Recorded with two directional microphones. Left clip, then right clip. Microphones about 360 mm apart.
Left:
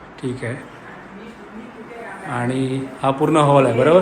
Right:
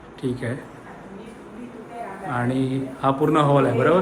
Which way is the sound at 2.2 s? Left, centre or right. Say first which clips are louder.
Left 2 dB; centre.